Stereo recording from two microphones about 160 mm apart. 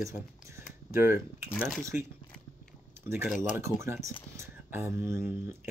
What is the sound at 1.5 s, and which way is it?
Speech, centre (ahead or behind).